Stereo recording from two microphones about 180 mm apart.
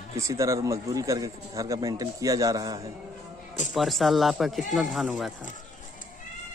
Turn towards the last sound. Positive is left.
turn(degrees=0)  # may be behind; listen again after turning